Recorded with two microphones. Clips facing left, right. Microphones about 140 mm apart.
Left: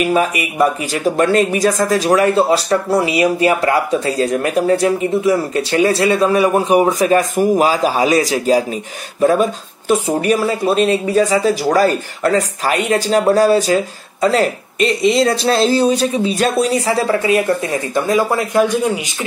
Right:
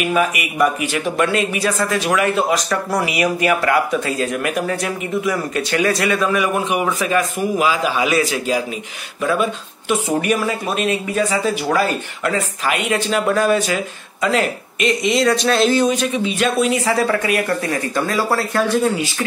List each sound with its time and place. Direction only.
0.0 s speech: 35° left (ahead or behind); by 19.2 s 15° left (ahead or behind)